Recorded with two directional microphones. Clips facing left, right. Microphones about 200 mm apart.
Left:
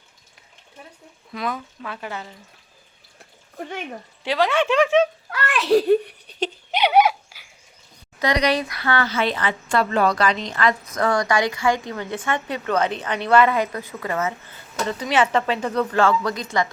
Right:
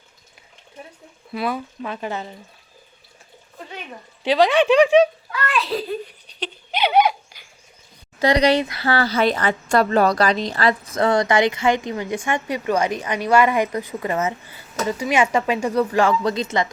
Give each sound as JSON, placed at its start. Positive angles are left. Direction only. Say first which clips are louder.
{"t": 1.3, "sound": "speech", "louder": "right 3 dB", "side_deg": -10}
{"t": 1.8, "sound": "speech", "louder": "right 5 dB", "side_deg": -25}
{"t": 3.6, "sound": "speech", "louder": "left 5 dB", "side_deg": 50}
{"t": 4.2, "sound": "speech", "louder": "right 4 dB", "side_deg": -15}
{"t": 5.3, "sound": "a sound", "louder": "left 5 dB", "side_deg": 75}
{"t": 6.7, "sound": "a sound", "louder": "even", "side_deg": 10}
{"t": 8.2, "sound": "speech", "louder": "right 4 dB", "side_deg": -30}